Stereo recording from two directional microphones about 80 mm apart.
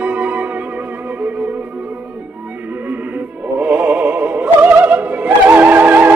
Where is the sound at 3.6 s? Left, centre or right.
Right.